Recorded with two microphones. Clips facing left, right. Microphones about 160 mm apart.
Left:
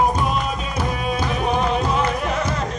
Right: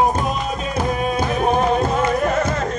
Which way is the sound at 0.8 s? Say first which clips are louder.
Right 4 dB; 45° right (ahead or behind).